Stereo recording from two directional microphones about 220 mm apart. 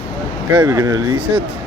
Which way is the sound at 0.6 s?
15° right (ahead or behind).